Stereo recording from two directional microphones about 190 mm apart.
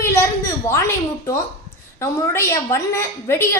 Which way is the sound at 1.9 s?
15° left (ahead or behind).